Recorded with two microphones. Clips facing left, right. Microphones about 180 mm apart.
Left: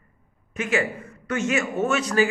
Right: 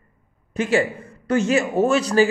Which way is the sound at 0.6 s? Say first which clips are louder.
Right 5 dB; 30° right (ahead or behind).